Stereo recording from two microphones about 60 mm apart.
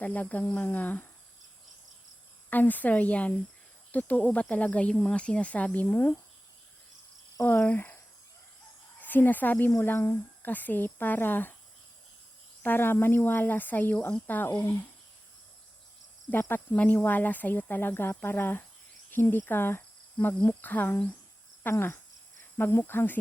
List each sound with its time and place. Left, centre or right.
0.0 s speech: left
2.5 s speech: left
7.4 s speech: left
9.0 s speech: left
12.6 s speech: left
16.3 s speech: left
16.7 s speech: left
21.6 s cricket: left
22.5 s speech: left